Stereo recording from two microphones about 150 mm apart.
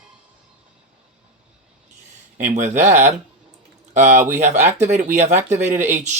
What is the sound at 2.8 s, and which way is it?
Speech, 55° right (ahead or behind).